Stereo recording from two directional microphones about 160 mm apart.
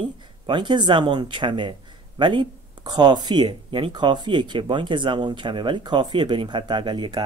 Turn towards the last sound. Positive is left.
turn(degrees=-30)  # may be behind; listen again after turning